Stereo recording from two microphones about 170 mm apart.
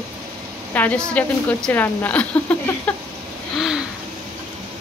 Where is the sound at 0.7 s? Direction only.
5° left (ahead or behind).